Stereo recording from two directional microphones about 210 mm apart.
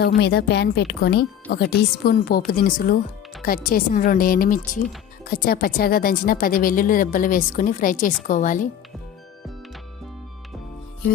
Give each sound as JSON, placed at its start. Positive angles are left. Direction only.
{"t": 0.2, "sound": "speech", "side_deg": 50}